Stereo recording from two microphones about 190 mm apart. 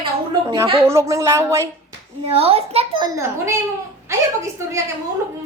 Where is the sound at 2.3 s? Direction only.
30° right (ahead or behind); by 3.6 s 15° right (ahead or behind).